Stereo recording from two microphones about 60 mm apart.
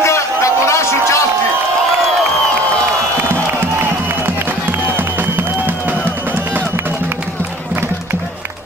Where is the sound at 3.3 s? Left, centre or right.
Right.